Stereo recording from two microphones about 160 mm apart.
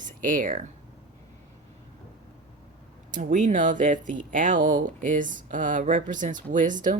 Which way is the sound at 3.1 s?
55° right (ahead or behind).